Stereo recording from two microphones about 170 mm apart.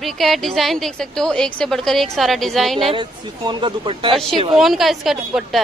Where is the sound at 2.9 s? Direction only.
30° right (ahead or behind).